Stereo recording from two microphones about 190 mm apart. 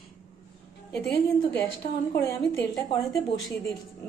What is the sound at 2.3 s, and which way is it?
Speech, 15° left (ahead or behind).